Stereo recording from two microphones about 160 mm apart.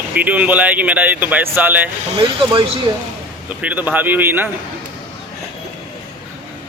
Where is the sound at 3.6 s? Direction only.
10° right (ahead or behind).